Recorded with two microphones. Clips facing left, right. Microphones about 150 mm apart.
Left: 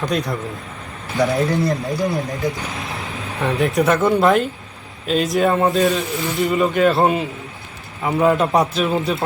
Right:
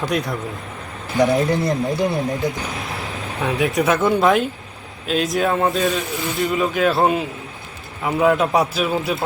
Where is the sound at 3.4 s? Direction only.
Centre (ahead or behind).